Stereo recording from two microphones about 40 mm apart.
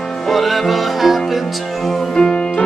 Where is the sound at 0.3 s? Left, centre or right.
Centre.